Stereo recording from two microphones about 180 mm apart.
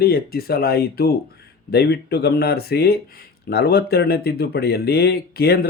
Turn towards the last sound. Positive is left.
turn(degrees=60)  # may be behind; listen again after turning